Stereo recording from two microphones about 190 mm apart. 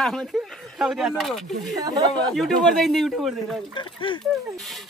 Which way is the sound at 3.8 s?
25° left (ahead or behind).